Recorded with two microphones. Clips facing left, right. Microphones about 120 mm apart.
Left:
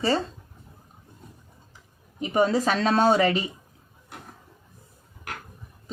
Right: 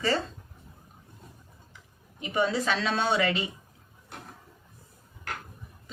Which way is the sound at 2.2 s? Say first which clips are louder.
Left 5 dB; 40° left (ahead or behind).